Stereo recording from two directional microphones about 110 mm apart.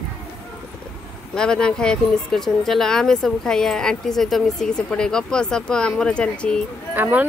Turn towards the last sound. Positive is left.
turn(degrees=-15)  # may be behind; listen again after turning